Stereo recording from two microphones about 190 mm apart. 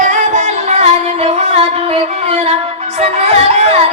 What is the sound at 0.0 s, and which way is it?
Music, 40° right (ahead or behind).